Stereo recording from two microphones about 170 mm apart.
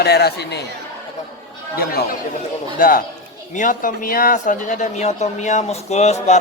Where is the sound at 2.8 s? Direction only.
55° left (ahead or behind).